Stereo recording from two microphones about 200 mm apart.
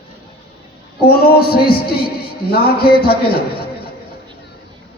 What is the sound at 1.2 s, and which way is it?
Music, 50° left (ahead or behind).